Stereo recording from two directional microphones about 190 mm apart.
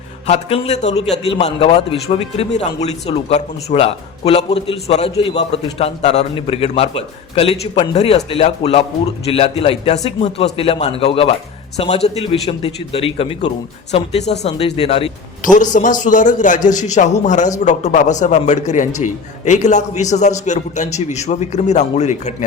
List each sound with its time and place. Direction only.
0.3 s a man's voice: 30° left (ahead or behind)